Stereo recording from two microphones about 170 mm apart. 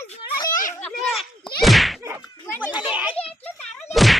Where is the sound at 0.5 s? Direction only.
50° left (ahead or behind).